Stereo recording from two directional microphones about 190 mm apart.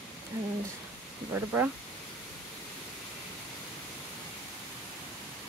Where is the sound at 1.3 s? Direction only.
10° right (ahead or behind).